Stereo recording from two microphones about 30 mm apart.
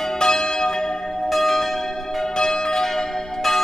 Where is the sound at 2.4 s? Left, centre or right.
Centre.